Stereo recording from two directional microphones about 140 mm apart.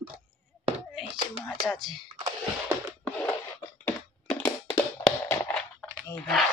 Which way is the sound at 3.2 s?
10° left (ahead or behind).